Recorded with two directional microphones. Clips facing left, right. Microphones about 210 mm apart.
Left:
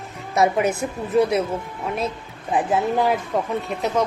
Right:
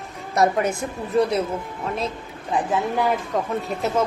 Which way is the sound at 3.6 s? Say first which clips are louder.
Even; centre (ahead or behind).